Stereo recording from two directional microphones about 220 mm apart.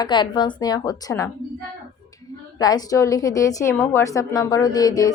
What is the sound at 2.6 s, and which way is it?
Speech, 15° left (ahead or behind).